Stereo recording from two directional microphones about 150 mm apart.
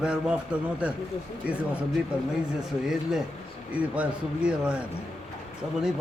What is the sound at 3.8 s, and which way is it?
Speech, 10° right (ahead or behind).